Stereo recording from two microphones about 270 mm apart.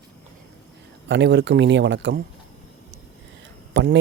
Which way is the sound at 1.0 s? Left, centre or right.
Right.